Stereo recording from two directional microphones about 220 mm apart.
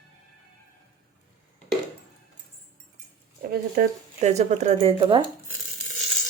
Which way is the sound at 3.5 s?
35° right (ahead or behind).